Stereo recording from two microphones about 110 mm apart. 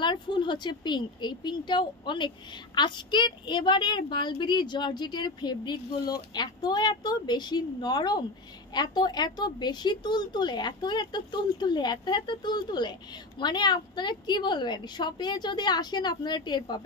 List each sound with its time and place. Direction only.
0.0 s a woman's voice: 45° left (ahead or behind)